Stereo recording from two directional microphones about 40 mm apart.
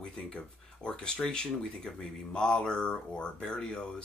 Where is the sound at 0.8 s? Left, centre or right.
Left.